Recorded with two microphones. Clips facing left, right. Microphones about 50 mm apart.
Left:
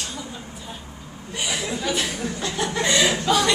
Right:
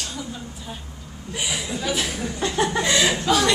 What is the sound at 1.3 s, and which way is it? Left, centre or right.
Chuckle, centre.